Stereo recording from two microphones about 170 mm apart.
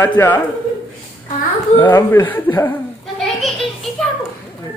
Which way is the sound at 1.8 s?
15° left (ahead or behind).